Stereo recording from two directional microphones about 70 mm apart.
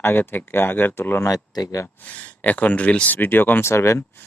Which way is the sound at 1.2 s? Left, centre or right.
Left.